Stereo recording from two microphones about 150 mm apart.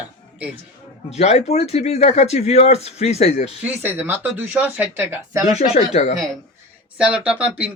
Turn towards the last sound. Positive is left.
turn(degrees=-10)  # may be behind; listen again after turning